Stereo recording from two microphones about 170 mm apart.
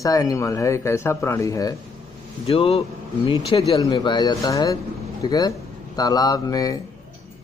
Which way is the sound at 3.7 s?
20° left (ahead or behind).